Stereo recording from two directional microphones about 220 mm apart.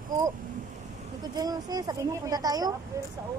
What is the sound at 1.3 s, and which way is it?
A woman's voice, 15° right (ahead or behind).